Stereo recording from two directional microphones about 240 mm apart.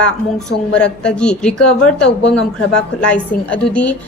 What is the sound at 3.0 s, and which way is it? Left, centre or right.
Speech, centre.